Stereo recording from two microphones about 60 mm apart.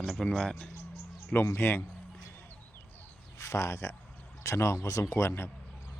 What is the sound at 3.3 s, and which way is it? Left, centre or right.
Speech, left.